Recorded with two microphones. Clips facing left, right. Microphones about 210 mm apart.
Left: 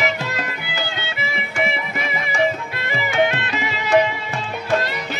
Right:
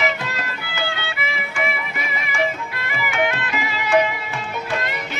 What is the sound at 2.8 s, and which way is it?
Music, 25° left (ahead or behind).